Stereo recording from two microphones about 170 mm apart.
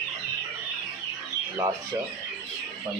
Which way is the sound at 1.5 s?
20° right (ahead or behind).